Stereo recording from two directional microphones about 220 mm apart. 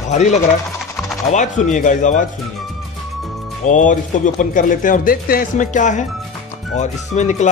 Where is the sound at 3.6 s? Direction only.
35° left (ahead or behind).